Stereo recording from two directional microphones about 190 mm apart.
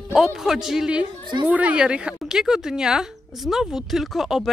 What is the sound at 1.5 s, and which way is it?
Speech, 5° right (ahead or behind).